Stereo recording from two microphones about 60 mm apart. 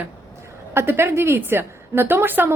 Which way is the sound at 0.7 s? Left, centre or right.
Right.